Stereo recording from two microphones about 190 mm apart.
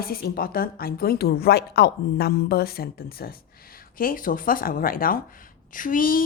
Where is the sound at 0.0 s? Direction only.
50° left (ahead or behind).